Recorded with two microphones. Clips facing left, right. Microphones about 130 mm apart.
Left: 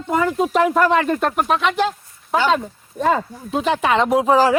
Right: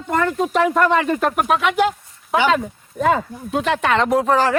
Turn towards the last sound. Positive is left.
turn(degrees=5)  # may be behind; listen again after turning